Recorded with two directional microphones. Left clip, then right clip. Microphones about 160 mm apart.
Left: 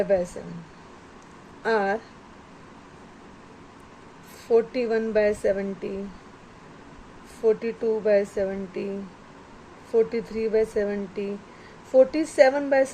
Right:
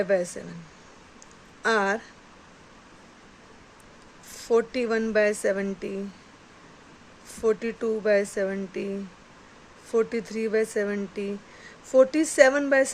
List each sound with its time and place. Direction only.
0.0 s speech: 30° right (ahead or behind)
1.6 s speech: 30° right (ahead or behind)
4.4 s speech: 30° right (ahead or behind)
7.4 s speech: 30° right (ahead or behind)
9.9 s speech: 35° right (ahead or behind)